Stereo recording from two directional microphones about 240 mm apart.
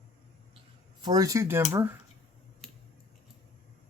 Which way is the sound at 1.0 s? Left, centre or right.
Centre.